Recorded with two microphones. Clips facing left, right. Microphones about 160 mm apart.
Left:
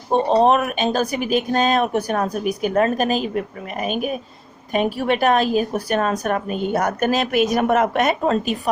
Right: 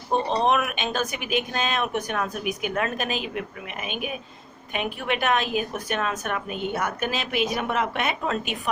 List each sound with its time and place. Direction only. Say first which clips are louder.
0.1 s speech: left 7 dB; 35° left (ahead or behind)